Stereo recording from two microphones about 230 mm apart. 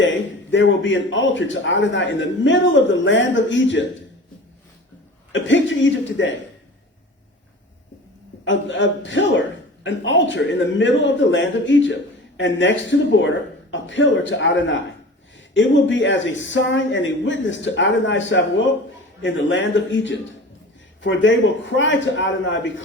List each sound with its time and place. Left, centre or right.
0.0 s a man's voice: left
5.3 s a man's voice: left
8.4 s a man's voice: left